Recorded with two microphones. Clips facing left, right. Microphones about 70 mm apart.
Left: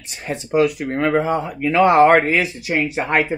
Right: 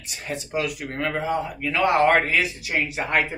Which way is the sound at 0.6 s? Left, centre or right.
Left.